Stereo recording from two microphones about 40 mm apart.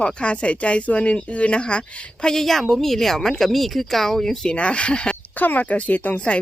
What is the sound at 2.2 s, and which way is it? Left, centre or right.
A woman's voice, centre.